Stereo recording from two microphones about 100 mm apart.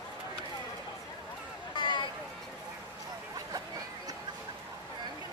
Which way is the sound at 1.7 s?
50° left (ahead or behind).